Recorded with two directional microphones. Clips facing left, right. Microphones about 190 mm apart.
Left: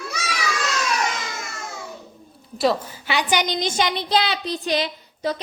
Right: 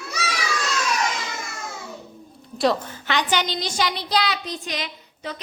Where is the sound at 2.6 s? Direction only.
5° left (ahead or behind).